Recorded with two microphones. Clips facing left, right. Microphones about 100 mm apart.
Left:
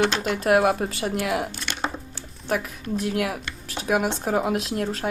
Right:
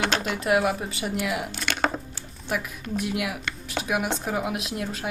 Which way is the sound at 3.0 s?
40° left (ahead or behind).